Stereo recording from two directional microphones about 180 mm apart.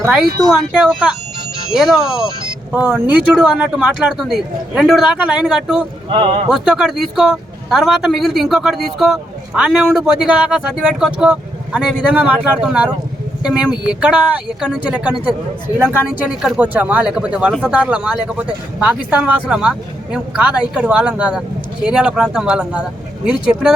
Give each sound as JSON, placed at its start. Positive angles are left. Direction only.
{"t": 0.0, "sound": "speech", "side_deg": 0}
{"t": 6.1, "sound": "speech", "side_deg": -25}
{"t": 6.5, "sound": "speech", "side_deg": -5}